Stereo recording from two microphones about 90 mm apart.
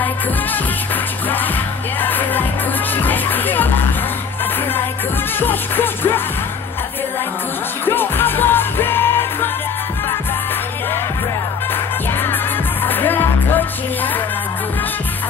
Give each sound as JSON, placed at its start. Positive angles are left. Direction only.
{"t": 2.0, "sound": "music", "side_deg": 20}
{"t": 5.4, "sound": "music", "side_deg": 25}
{"t": 7.8, "sound": "music", "side_deg": 25}
{"t": 12.8, "sound": "music", "side_deg": 20}